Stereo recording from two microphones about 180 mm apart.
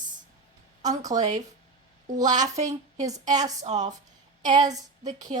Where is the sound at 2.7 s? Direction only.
20° right (ahead or behind).